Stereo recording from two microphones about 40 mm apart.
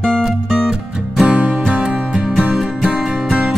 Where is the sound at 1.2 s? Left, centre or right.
Right.